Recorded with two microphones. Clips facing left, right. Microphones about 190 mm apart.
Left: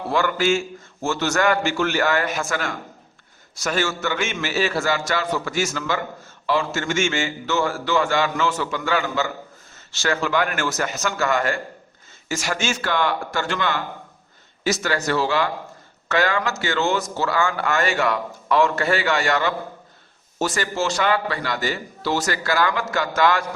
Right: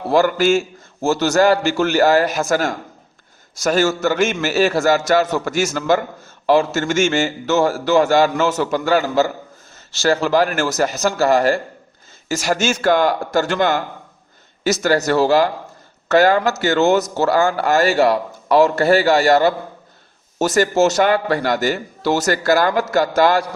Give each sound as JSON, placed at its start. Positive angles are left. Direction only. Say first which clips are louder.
{"t": 0.1, "sound": "a man's voice", "louder": "right 6 dB", "side_deg": -40}